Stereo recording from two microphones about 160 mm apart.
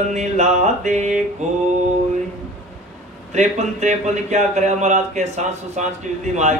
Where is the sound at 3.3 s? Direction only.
45° right (ahead or behind).